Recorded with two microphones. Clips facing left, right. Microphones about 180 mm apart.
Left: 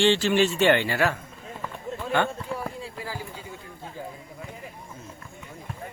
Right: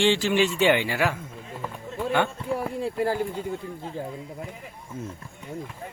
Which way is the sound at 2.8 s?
55° right (ahead or behind).